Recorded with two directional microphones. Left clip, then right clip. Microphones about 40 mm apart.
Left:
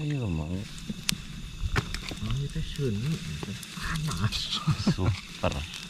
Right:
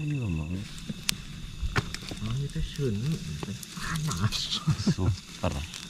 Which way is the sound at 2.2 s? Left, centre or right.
Centre.